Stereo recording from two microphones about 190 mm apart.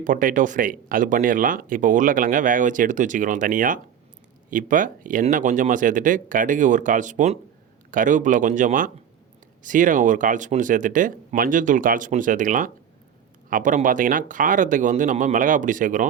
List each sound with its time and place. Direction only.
0.0 s speech: 45° right (ahead or behind)